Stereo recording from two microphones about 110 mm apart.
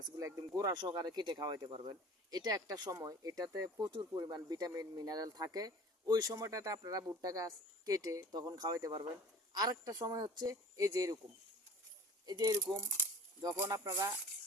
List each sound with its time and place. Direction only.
0.2 s speech: 30° right (ahead or behind)
12.2 s speech: 35° right (ahead or behind)